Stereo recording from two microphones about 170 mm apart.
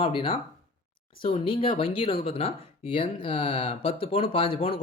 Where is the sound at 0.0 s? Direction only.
30° left (ahead or behind).